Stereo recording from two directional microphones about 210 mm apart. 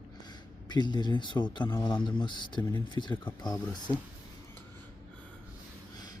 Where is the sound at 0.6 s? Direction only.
20° left (ahead or behind).